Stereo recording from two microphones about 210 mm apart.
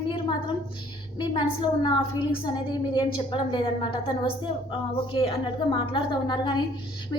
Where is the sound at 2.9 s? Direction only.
20° left (ahead or behind).